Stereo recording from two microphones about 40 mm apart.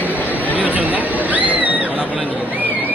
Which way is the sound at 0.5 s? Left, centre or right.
Right.